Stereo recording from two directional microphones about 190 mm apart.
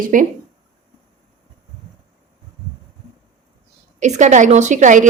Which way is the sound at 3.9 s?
40° right (ahead or behind).